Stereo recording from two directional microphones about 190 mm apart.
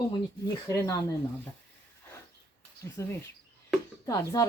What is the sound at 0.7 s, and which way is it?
Speech, 15° left (ahead or behind).